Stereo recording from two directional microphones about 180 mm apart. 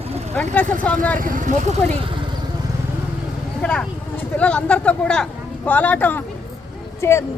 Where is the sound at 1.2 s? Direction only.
50° right (ahead or behind).